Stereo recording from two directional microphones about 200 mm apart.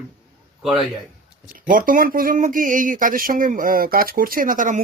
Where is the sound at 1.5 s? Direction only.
45° right (ahead or behind).